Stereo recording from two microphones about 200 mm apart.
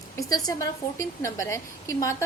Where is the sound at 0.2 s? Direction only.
15° left (ahead or behind).